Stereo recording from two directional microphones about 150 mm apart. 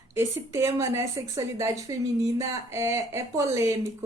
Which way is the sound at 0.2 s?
20° right (ahead or behind).